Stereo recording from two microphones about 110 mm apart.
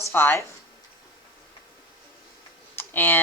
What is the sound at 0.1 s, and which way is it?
Speech, 20° left (ahead or behind).